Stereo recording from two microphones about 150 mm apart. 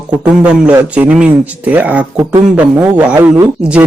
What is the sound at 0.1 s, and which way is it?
Speech, 5° right (ahead or behind).